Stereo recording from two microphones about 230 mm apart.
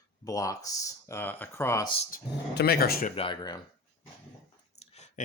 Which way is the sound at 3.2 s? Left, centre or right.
Centre.